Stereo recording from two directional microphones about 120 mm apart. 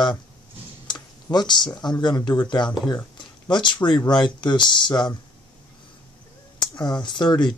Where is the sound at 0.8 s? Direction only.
35° left (ahead or behind).